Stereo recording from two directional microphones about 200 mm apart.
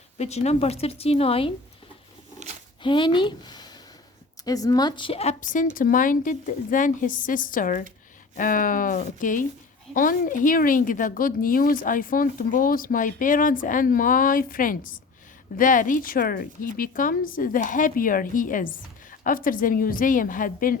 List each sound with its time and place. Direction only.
0.2 s speech: 35° left (ahead or behind)
2.8 s speech: 25° left (ahead or behind); by 20.7 s 40° left (ahead or behind)